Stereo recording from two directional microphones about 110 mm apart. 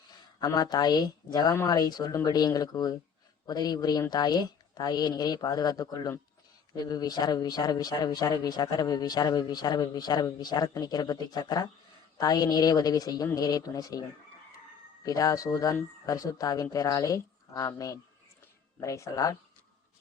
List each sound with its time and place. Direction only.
0.1 s a man's voice: 35° left (ahead or behind)
15.0 s a man's voice: 35° left (ahead or behind)